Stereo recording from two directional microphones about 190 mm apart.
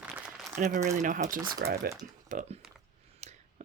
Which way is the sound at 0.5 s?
40° right (ahead or behind).